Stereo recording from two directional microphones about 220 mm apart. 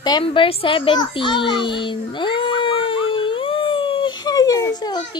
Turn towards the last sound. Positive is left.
turn(degrees=20)  # may be behind; listen again after turning